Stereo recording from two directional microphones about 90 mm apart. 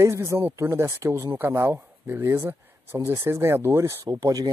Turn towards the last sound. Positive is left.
turn(degrees=-45)  # may be behind; listen again after turning